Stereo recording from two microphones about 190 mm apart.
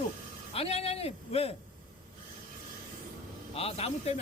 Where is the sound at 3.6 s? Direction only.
30° left (ahead or behind).